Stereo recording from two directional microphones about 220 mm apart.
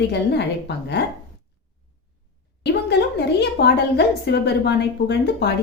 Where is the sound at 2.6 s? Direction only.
50° left (ahead or behind).